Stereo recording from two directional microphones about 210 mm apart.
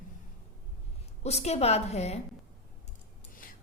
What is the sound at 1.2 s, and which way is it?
A woman's voice, 30° left (ahead or behind).